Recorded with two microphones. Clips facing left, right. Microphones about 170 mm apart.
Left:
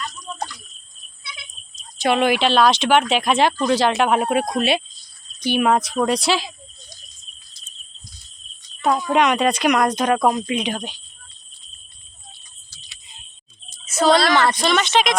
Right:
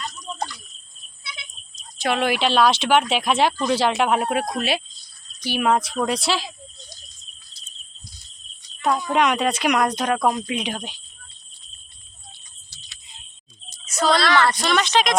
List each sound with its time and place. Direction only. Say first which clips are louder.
2.0 s speech: left 4 dB; centre (ahead or behind)
8.8 s speech: left 2 dB; 5° left (ahead or behind)
10.0 s speech: left 3 dB; 5° left (ahead or behind)
14.1 s speech: left 2 dB; 20° left (ahead or behind)
14.6 s speech: left 2 dB; centre (ahead or behind)